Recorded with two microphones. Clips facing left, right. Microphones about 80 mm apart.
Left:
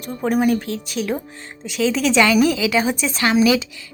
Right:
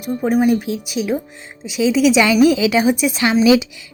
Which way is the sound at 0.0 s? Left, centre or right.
Centre.